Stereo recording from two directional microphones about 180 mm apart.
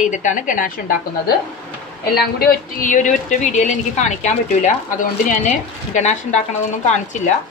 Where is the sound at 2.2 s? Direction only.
60° left (ahead or behind).